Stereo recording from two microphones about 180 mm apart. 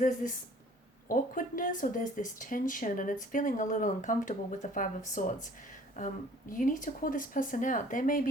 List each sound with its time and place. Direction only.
0.0 s speech: 45° left (ahead or behind)
6.5 s speech: 45° left (ahead or behind)